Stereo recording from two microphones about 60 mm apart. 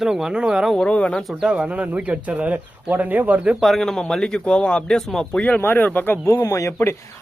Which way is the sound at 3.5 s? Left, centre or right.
Centre.